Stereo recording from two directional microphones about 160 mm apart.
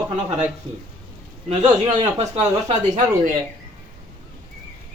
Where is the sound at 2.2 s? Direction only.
45° right (ahead or behind).